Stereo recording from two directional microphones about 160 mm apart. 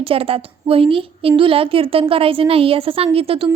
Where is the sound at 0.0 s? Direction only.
35° right (ahead or behind).